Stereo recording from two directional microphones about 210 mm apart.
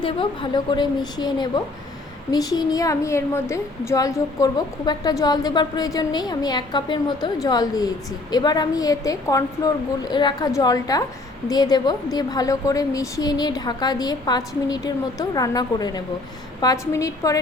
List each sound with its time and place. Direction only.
0.0 s a woman's voice: 25° left (ahead or behind)